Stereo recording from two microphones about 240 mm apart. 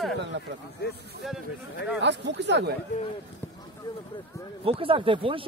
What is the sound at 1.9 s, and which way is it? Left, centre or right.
Speech, right.